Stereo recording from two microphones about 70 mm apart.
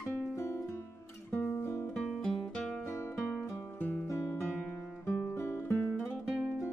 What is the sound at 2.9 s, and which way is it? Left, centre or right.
Music, left.